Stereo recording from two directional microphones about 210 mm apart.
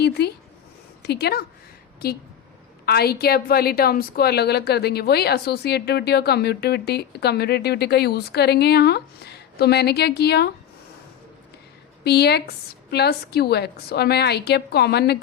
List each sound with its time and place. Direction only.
1.0 s a woman's voice: 50° left (ahead or behind)
2.8 s a woman's voice: 50° left (ahead or behind)
12.0 s a woman's voice: 50° left (ahead or behind)